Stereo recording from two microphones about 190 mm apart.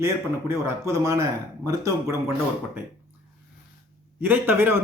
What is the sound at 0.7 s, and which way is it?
Speech, 15° right (ahead or behind).